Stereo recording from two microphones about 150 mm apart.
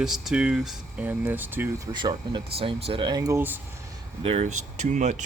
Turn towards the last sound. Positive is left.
turn(degrees=-55)  # may be behind; listen again after turning